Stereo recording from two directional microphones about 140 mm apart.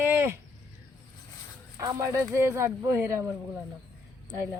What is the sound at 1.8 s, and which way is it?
Speech, 25° right (ahead or behind).